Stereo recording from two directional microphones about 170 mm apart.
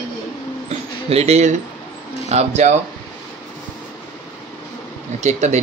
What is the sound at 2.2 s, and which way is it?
Speech, 40° right (ahead or behind).